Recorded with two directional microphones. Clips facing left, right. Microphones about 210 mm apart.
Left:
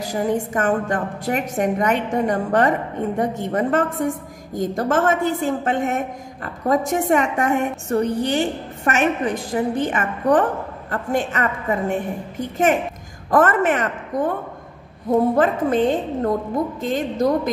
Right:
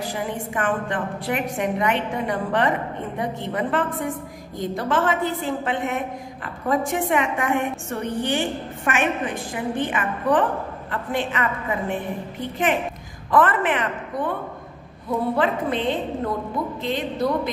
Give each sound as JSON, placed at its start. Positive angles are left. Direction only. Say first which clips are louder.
{"t": 0.0, "sound": "a woman's voice", "louder": "left 6 dB", "side_deg": 40}